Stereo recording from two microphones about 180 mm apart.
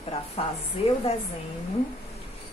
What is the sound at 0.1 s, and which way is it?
A woman's voice, 35° left (ahead or behind).